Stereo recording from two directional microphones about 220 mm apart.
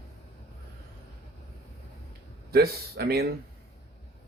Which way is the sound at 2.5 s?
45° right (ahead or behind).